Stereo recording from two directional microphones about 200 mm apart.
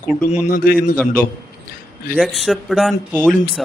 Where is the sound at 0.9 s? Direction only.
10° left (ahead or behind).